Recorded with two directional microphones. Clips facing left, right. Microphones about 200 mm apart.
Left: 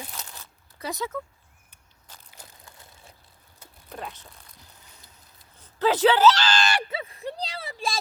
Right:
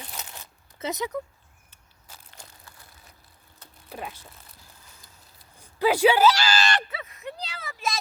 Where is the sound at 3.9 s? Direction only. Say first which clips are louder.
Right 1 dB; 5° right (ahead or behind).